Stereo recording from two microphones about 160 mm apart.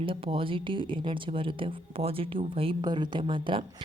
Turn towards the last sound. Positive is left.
turn(degrees=-30)  # may be behind; listen again after turning